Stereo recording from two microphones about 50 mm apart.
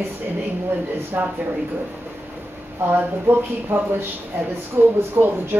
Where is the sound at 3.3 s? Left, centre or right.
Right.